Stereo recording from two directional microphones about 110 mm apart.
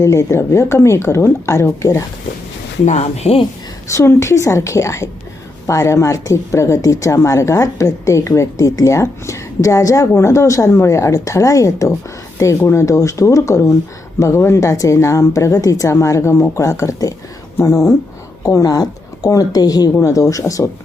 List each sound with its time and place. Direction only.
0.0 s a woman's voice: 25° left (ahead or behind)
2.8 s speech: 85° left; by 3.4 s 70° left (ahead or behind)
3.8 s a woman's voice: 25° left (ahead or behind)